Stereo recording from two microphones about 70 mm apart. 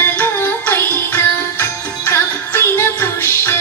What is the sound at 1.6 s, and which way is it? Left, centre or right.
Music, left.